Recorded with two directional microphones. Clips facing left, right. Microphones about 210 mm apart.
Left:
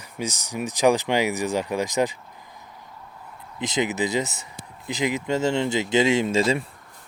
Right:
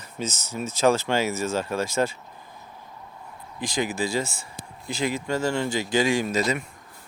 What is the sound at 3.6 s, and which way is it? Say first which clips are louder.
Speech: left 2 dB; 20° left (ahead or behind).